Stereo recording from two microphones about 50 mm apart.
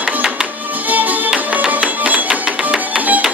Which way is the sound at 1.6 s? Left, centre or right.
Right.